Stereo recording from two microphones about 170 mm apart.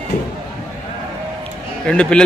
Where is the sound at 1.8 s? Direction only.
5° left (ahead or behind).